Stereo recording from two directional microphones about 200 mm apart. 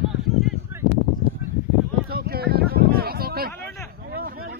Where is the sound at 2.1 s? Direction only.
50° right (ahead or behind).